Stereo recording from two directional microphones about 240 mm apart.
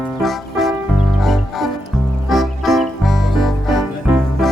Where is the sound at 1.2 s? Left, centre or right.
Centre.